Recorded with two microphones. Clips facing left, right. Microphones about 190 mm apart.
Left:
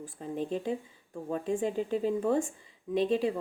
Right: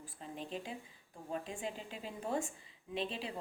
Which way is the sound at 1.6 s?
50° left (ahead or behind).